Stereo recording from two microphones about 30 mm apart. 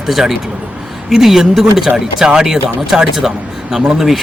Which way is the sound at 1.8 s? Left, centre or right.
Right.